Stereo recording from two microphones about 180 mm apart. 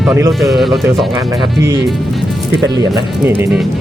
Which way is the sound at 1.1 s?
20° right (ahead or behind).